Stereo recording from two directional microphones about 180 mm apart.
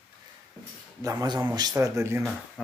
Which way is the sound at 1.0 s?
20° right (ahead or behind).